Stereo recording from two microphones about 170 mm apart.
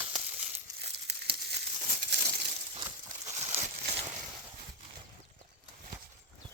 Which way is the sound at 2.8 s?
20° right (ahead or behind).